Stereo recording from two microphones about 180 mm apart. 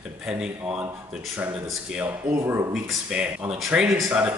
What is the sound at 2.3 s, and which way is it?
A man's voice, 15° right (ahead or behind).